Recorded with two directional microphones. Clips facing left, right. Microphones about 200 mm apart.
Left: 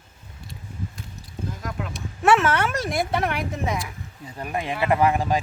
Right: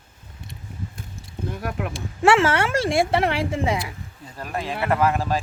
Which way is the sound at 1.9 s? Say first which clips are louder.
Right 1 dB; 30° right (ahead or behind).